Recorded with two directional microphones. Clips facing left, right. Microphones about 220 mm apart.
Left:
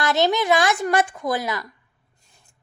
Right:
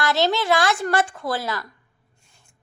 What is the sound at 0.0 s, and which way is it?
A woman's voice, 20° left (ahead or behind).